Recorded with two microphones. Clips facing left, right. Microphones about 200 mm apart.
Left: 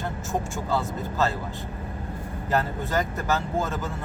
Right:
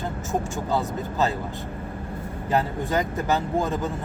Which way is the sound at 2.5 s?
15° right (ahead or behind).